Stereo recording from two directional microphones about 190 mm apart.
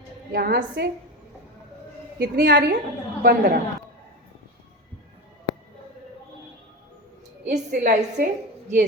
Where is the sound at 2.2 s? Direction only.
50° right (ahead or behind).